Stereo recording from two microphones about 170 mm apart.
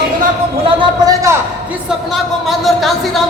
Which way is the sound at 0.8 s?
20° right (ahead or behind).